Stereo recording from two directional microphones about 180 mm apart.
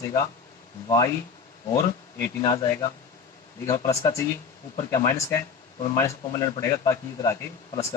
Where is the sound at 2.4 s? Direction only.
20° left (ahead or behind).